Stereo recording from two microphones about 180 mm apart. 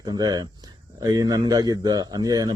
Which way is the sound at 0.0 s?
20° right (ahead or behind).